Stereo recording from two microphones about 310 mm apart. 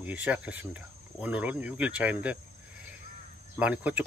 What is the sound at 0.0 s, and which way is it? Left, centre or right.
Speech, centre.